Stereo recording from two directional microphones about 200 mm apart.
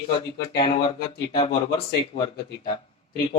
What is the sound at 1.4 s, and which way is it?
Speech, 20° left (ahead or behind).